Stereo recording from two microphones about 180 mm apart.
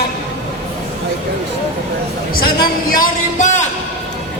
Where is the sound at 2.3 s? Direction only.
55° left (ahead or behind).